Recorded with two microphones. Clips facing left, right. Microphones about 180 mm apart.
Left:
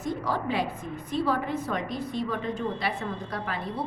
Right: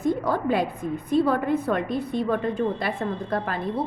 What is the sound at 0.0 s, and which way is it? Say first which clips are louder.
A woman's voice: right 6 dB; 55° right (ahead or behind).